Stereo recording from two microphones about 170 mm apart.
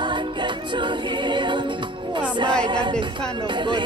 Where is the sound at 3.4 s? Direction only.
30° right (ahead or behind).